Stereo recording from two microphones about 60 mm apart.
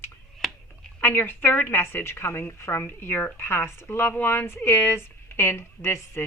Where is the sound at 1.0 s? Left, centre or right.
Left.